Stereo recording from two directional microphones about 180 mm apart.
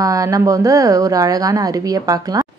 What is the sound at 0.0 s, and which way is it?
A woman's voice, 20° right (ahead or behind).